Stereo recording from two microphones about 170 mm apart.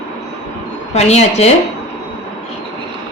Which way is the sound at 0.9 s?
40° left (ahead or behind).